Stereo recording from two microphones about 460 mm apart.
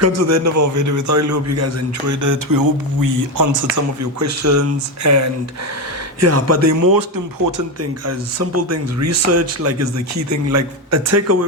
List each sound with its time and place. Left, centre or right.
0.0 s a man's voice: right
8.0 s a man's voice: right